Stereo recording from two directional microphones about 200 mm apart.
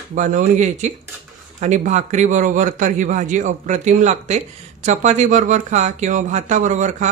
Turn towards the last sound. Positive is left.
turn(degrees=-35)  # may be behind; listen again after turning